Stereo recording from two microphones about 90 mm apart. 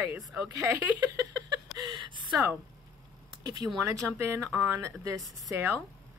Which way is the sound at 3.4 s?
50° right (ahead or behind).